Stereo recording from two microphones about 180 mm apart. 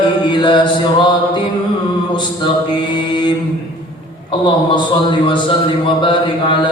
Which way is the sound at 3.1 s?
25° left (ahead or behind).